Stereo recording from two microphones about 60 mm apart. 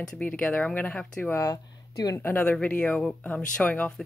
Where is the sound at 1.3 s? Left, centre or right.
Left.